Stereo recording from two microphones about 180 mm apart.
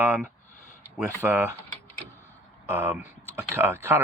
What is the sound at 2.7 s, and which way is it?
Speech, 10° right (ahead or behind).